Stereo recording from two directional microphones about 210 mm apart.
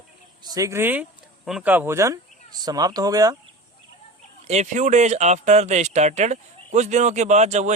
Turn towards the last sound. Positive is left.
turn(degrees=-35)  # may be behind; listen again after turning